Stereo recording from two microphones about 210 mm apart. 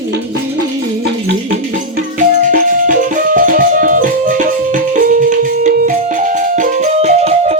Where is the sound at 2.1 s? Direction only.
40° right (ahead or behind).